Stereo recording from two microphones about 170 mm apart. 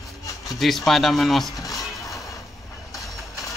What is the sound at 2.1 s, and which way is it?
Vehicle, 20° left (ahead or behind).